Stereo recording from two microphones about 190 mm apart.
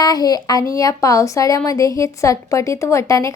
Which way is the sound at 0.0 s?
20° left (ahead or behind).